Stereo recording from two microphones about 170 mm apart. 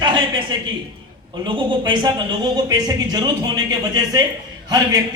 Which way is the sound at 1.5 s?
25° right (ahead or behind).